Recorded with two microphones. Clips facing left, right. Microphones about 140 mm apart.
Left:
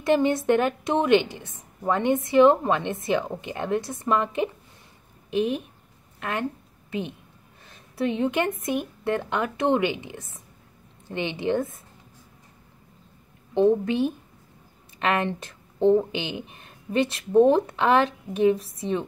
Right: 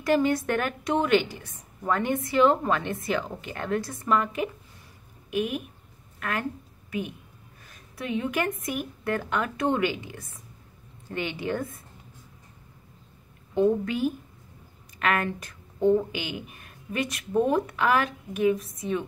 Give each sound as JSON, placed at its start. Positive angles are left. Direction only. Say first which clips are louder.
{"t": 0.0, "sound": "a woman's voice", "louder": "left 2 dB", "side_deg": 25}
{"t": 6.1, "sound": "a sound", "louder": "left 1 dB", "side_deg": 25}
{"t": 6.9, "sound": "a woman's voice", "louder": "left 1 dB", "side_deg": 25}
{"t": 7.6, "sound": "a sound", "louder": "left 8 dB", "side_deg": 25}
{"t": 8.6, "sound": "a woman's voice", "louder": "left 4 dB", "side_deg": 25}
{"t": 13.6, "sound": "a woman's voice", "louder": "left 3 dB", "side_deg": 25}